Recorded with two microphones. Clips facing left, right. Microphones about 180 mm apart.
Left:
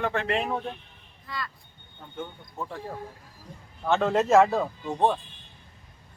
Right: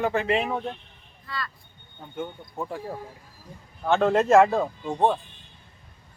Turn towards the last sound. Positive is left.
turn(degrees=-10)  # may be behind; listen again after turning